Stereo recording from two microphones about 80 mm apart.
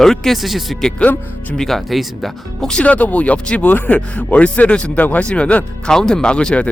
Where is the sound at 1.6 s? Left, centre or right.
Centre.